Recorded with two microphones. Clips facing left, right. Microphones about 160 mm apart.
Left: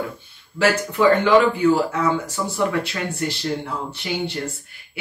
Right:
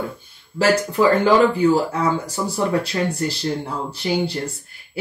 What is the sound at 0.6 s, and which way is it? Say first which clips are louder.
Speech: right 2 dB; 35° right (ahead or behind).